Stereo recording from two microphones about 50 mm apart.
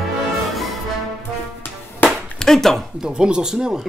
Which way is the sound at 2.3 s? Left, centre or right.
Centre.